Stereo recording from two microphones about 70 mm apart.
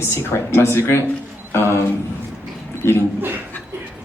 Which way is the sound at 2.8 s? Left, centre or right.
Left.